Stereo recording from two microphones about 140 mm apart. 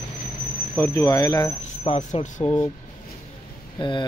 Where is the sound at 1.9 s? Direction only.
45° left (ahead or behind).